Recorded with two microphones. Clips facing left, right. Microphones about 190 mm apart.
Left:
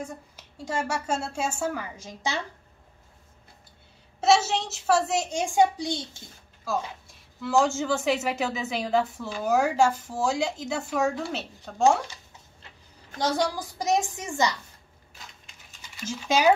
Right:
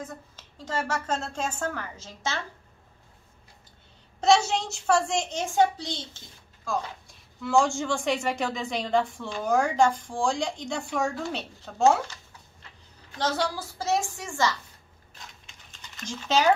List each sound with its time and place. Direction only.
0.0 s a woman's voice: 10° left (ahead or behind)
4.2 s a woman's voice: 5° left (ahead or behind)
13.2 s a woman's voice: 15° left (ahead or behind)
15.1 s a sound: 5° left (ahead or behind)